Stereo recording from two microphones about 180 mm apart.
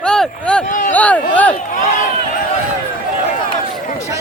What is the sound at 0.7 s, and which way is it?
Speech, 45° left (ahead or behind).